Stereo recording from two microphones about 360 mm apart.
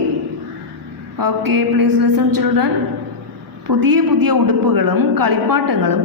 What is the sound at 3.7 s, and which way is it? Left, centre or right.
A woman's voice, right.